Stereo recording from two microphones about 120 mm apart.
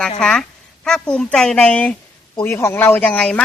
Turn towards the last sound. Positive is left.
turn(degrees=10)  # may be behind; listen again after turning